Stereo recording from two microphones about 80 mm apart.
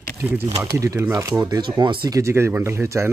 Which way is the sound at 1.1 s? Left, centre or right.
Right.